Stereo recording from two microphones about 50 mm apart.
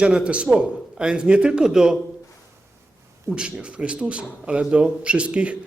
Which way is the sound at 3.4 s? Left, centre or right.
Right.